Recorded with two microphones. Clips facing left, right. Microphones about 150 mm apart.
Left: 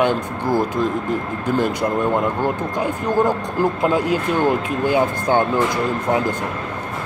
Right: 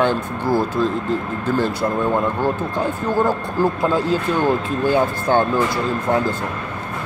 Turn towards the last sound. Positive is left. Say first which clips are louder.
# even
turn(degrees=15)  # may be behind; listen again after turning